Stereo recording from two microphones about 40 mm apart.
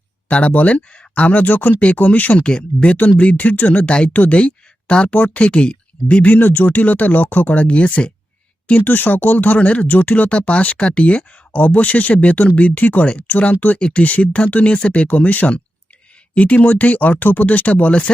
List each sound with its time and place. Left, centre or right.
0.3 s speech: left
2.4 s speech: left
3.8 s speech: left
4.1 s speech: left
4.4 s speech: left
5.1 s speech: left
5.5 s speech: left
6.3 s speech: left
8.8 s speech: left
10.2 s speech: left
10.8 s speech: left
13.7 s speech: left